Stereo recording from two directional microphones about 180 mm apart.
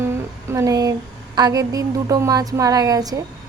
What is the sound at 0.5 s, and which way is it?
Speech, 20° right (ahead or behind).